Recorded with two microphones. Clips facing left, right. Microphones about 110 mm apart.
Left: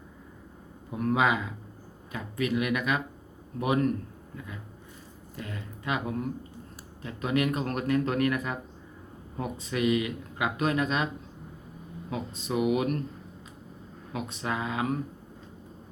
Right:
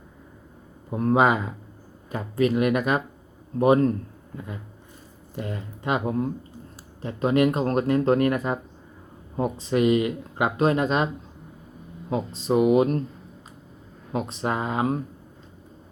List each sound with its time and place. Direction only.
0.9 s speech: 35° right (ahead or behind)
5.4 s speech: 35° right (ahead or behind)
12.1 s speech: 35° right (ahead or behind)
14.1 s speech: 35° right (ahead or behind)